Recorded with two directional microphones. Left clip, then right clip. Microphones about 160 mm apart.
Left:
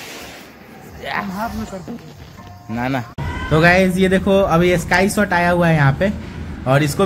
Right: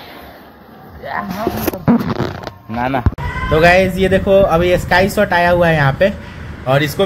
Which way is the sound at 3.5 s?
Centre (ahead or behind).